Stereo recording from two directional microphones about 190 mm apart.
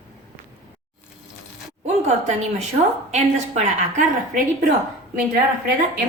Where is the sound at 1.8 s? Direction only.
40° right (ahead or behind).